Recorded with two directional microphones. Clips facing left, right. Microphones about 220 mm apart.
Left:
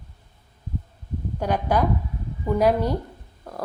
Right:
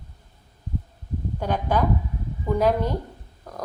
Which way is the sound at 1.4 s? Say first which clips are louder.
Left 1 dB; 10° left (ahead or behind).